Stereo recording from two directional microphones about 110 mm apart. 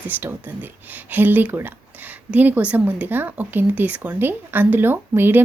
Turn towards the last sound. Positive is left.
turn(degrees=-20)  # may be behind; listen again after turning